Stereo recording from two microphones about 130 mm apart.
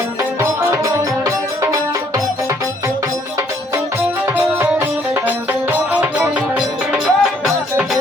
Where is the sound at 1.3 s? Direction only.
25° right (ahead or behind).